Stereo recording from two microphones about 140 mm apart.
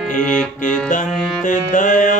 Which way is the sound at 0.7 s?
65° left (ahead or behind).